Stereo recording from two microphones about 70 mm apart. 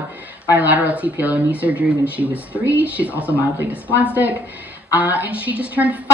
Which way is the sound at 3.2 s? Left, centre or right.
Left.